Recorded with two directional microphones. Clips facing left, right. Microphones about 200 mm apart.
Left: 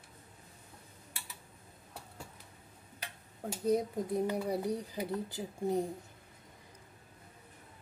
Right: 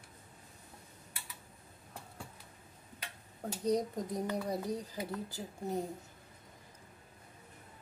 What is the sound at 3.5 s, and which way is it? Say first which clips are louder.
Speech: left 2 dB; 5° left (ahead or behind).